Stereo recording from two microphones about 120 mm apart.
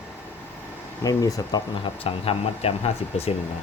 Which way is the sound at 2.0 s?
55° left (ahead or behind).